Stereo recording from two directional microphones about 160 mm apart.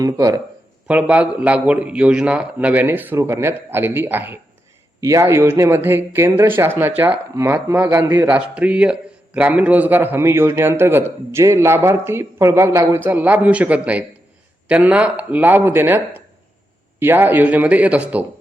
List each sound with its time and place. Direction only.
0.0 s speech: 25° right (ahead or behind)
0.9 s a man's voice: 10° right (ahead or behind)